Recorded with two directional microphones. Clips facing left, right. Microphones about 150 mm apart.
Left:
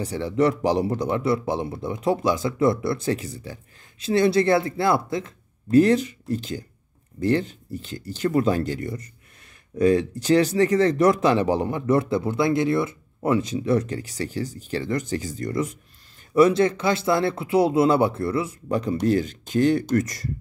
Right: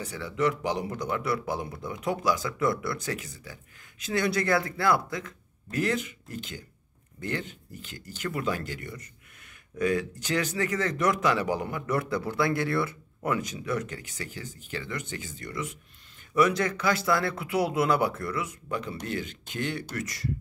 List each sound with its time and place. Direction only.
0.0 s speech: 30° left (ahead or behind)
16.3 s speech: 30° left (ahead or behind)